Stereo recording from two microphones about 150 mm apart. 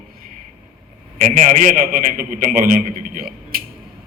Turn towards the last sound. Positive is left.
turn(degrees=-75)  # may be behind; listen again after turning